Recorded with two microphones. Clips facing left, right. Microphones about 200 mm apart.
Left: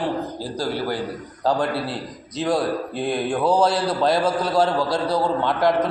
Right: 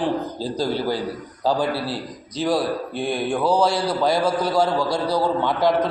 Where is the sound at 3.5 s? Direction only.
5° left (ahead or behind).